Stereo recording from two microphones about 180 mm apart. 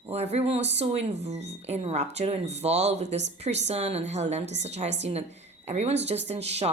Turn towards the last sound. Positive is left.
turn(degrees=-35)  # may be behind; listen again after turning